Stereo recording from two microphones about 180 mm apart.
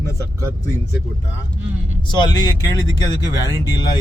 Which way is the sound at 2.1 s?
25° left (ahead or behind).